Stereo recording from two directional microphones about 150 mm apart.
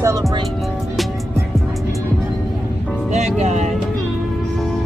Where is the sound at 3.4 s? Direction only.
50° right (ahead or behind).